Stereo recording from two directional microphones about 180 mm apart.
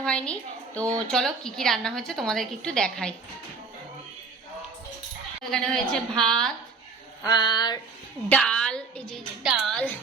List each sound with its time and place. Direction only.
0.0 s a woman's voice: 5° left (ahead or behind)
5.5 s a woman's voice: 5° left (ahead or behind)
7.2 s a sound: 20° left (ahead or behind)
8.3 s a woman's voice: 5° left (ahead or behind)